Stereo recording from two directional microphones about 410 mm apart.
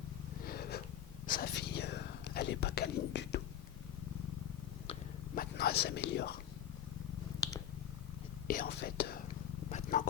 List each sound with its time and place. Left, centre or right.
0.4 s snort: left
1.3 s whispering: left
4.9 s whispering: centre
7.3 s purr: centre
8.4 s speech: left
9.6 s purr: centre